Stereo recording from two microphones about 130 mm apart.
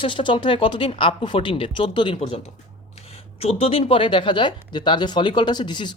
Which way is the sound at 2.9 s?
50° left (ahead or behind).